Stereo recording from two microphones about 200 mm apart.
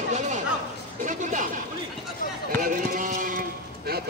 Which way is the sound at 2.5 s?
45° right (ahead or behind).